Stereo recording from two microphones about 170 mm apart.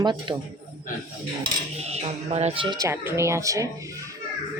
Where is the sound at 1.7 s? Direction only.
40° right (ahead or behind).